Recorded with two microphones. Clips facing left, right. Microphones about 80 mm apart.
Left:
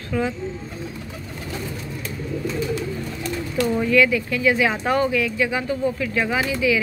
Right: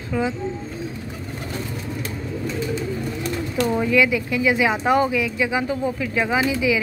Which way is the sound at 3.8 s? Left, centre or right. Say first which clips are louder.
Left 1 dB; centre.